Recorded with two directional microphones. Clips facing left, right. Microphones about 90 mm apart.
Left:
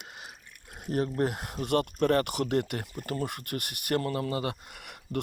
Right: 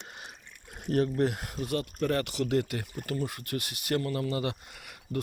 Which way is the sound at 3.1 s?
60° left (ahead or behind).